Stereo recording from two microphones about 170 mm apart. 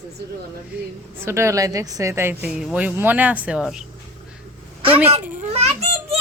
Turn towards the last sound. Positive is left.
turn(degrees=-35)  # may be behind; listen again after turning